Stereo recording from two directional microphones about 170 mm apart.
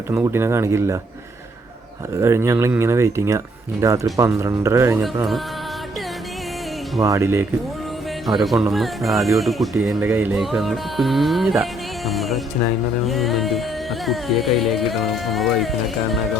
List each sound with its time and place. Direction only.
0.1 s speech: 15° right (ahead or behind)
2.1 s speech: 15° right (ahead or behind)
7.0 s speech: 15° right (ahead or behind)
8.4 s music: centre (ahead or behind)
10.0 s speech: 10° right (ahead or behind)
10.4 s music: centre (ahead or behind)